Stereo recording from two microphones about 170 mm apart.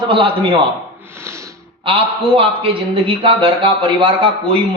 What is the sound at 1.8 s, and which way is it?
A man's voice, 30° right (ahead or behind).